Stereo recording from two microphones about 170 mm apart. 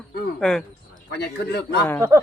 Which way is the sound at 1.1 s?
75° left (ahead or behind).